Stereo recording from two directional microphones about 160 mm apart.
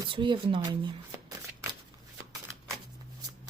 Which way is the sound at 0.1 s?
30° right (ahead or behind).